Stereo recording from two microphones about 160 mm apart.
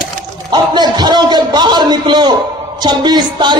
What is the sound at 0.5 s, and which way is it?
A man's voice, 30° right (ahead or behind).